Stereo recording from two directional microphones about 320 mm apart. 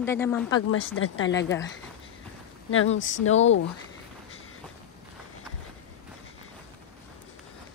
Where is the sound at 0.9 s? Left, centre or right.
Left.